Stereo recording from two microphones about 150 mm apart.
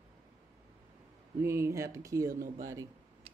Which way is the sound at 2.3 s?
65° right (ahead or behind).